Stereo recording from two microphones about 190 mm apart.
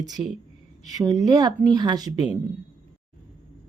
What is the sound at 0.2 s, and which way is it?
Speech, 5° right (ahead or behind).